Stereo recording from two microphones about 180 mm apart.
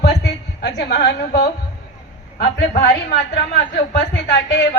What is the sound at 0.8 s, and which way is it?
Speech, 65° left (ahead or behind).